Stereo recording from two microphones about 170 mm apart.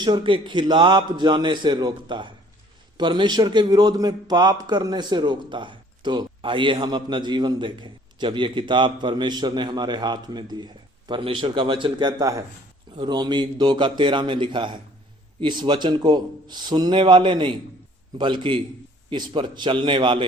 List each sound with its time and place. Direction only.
0.0 s a man's voice: 25° right (ahead or behind)